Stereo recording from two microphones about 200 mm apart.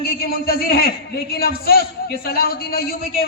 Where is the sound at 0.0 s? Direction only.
50° left (ahead or behind).